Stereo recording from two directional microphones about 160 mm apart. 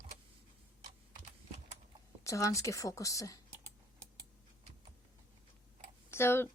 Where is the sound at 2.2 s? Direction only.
20° left (ahead or behind).